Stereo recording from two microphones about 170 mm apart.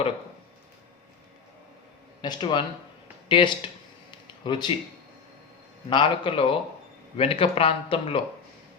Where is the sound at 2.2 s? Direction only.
25° left (ahead or behind).